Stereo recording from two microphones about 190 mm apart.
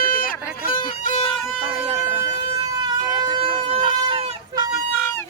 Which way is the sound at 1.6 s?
30° right (ahead or behind).